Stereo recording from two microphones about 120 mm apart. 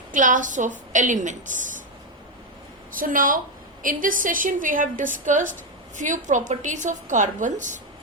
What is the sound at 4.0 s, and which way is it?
A woman's voice, 90° right.